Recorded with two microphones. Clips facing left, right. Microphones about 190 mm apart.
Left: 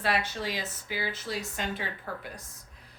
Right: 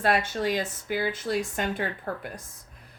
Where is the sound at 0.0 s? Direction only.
50° right (ahead or behind).